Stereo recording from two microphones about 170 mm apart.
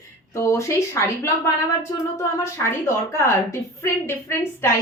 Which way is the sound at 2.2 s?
15° left (ahead or behind).